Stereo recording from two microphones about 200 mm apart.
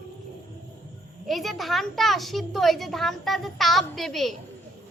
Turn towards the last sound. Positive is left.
turn(degrees=0)  # may be behind; listen again after turning